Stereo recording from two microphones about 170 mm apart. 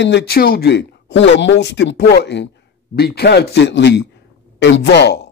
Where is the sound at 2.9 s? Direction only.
70° left (ahead or behind).